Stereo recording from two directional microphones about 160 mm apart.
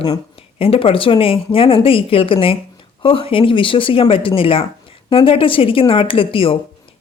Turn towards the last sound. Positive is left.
turn(degrees=35)  # may be behind; listen again after turning